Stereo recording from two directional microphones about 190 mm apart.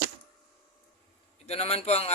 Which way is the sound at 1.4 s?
35° left (ahead or behind).